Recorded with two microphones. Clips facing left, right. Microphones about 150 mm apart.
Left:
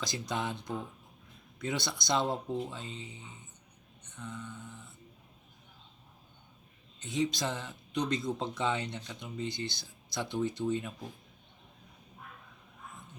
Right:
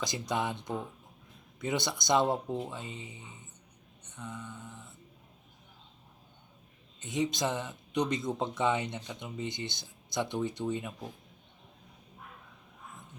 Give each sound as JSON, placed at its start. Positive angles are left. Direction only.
{"t": 0.0, "sound": "speech", "side_deg": -15}
{"t": 4.0, "sound": "mantra", "side_deg": -20}
{"t": 7.0, "sound": "speech", "side_deg": -20}